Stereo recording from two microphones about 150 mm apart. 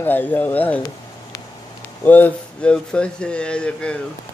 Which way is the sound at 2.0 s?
10° left (ahead or behind).